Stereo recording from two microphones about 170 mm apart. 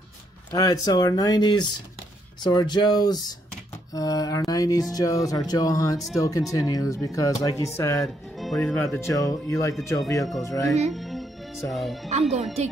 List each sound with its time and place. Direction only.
0.5 s speech: 20° left (ahead or behind)
10.9 s speech: centre (ahead or behind)
12.1 s speech: 40° right (ahead or behind)